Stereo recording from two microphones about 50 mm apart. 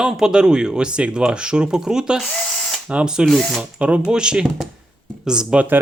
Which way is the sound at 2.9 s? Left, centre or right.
Centre.